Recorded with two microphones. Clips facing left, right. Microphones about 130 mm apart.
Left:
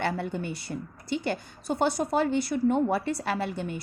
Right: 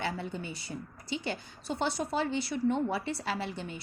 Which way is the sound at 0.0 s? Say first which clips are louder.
Left 6 dB; 60° left (ahead or behind).